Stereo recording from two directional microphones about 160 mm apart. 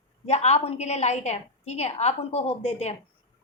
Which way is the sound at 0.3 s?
45° left (ahead or behind).